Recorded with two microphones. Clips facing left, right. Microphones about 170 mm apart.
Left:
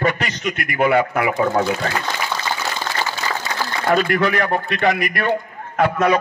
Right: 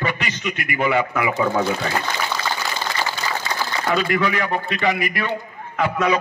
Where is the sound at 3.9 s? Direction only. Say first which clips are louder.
Left 3 dB; 50° left (ahead or behind).